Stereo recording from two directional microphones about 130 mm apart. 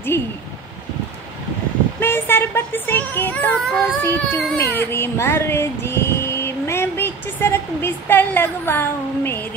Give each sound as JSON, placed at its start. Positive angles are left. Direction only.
{"t": 0.1, "sound": "speech", "side_deg": 20}
{"t": 2.0, "sound": "speech", "side_deg": 15}
{"t": 4.0, "sound": "child singing", "side_deg": 15}
{"t": 4.6, "sound": "speech", "side_deg": 20}